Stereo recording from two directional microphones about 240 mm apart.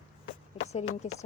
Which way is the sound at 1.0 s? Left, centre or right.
Left.